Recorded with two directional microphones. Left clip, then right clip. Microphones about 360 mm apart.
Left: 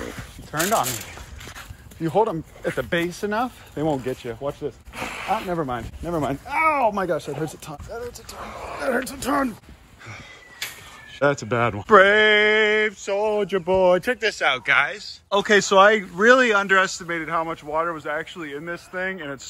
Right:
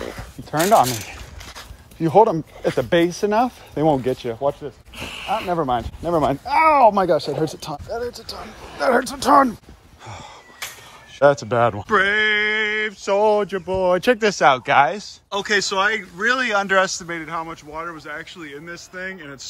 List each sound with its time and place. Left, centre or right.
0.0 s a sound: right
2.0 s speech: right
4.9 s a sound: centre
5.5 s speech: centre
8.8 s speech: centre
11.1 s a man's voice: centre
13.0 s speech: right
13.4 s a man's voice: centre
14.0 s speech: right
15.2 s a man's voice: centre